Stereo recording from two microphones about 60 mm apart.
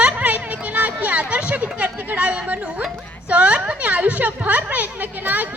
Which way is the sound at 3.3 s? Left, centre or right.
Right.